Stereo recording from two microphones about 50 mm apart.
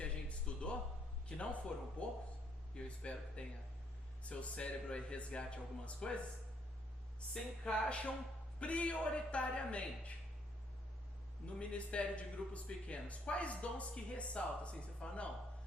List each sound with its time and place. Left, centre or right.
0.0 s a sound: left
1.4 s a man's voice: left
7.6 s a man's voice: left
11.5 s a man's voice: left